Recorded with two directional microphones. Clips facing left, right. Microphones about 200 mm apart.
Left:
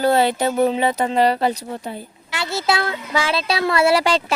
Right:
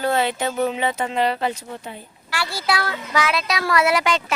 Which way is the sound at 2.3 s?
20° left (ahead or behind).